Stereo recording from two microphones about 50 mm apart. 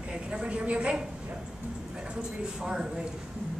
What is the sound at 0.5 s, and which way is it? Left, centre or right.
Speech, right.